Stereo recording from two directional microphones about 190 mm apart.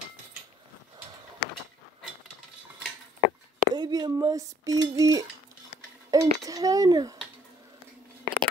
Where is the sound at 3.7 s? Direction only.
20° right (ahead or behind).